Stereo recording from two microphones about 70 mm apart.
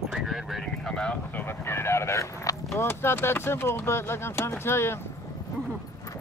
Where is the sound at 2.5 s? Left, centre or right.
Left.